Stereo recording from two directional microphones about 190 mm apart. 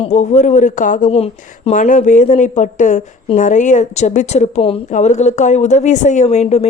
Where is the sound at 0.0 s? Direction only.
35° left (ahead or behind).